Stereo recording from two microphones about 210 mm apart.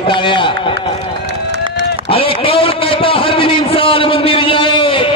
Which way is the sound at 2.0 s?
25° left (ahead or behind).